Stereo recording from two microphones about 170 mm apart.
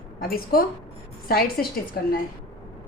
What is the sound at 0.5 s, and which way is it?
Speech, 60° left (ahead or behind).